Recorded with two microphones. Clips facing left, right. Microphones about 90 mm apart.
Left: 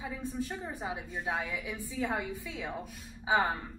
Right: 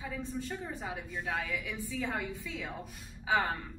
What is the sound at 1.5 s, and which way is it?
A woman's voice, 20° left (ahead or behind).